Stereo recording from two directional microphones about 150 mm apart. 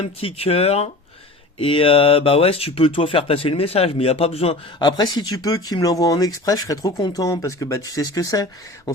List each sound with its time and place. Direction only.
0.0 s speech: 40° left (ahead or behind); by 8.4 s 25° left (ahead or behind)